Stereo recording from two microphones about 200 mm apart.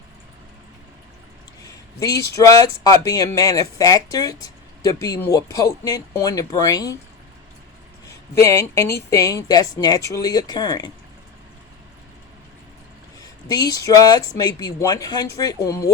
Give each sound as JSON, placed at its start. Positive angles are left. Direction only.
{"t": 1.6, "sound": "speech", "side_deg": 15}
{"t": 8.4, "sound": "speech", "side_deg": 15}
{"t": 13.2, "sound": "speech", "side_deg": 20}